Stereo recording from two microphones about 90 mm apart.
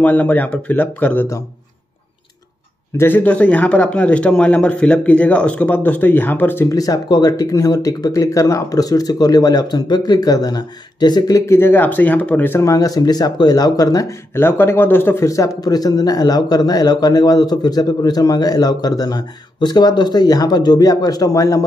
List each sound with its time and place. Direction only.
0.0 s a man's voice: 15° left (ahead or behind)
3.0 s a man's voice: 20° left (ahead or behind)
6.7 s speech: 40° left (ahead or behind)
11.4 s speech: 25° left (ahead or behind)
12.5 s speech: 40° left (ahead or behind)
14.3 s speech: 25° left (ahead or behind)
15.2 s speech: 40° left (ahead or behind)